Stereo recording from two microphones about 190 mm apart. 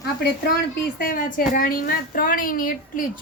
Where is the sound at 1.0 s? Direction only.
45° left (ahead or behind).